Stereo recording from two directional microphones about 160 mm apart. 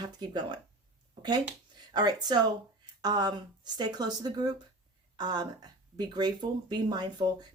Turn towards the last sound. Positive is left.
turn(degrees=-25)  # may be behind; listen again after turning